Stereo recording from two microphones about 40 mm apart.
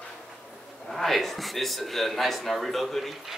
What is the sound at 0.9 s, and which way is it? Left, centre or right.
Speech, centre.